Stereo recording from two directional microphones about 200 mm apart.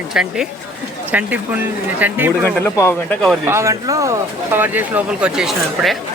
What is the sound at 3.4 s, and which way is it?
Speech, 15° right (ahead or behind).